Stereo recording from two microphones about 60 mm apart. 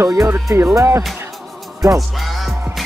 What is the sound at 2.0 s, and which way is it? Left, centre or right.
Music, centre.